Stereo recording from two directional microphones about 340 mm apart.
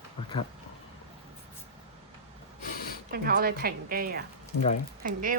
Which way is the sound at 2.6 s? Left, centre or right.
Left.